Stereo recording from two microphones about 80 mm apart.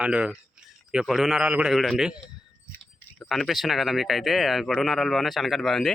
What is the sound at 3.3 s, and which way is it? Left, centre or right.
A man's voice, centre.